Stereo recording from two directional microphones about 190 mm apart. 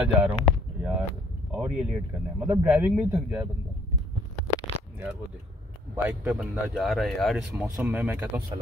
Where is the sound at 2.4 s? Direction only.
5° right (ahead or behind).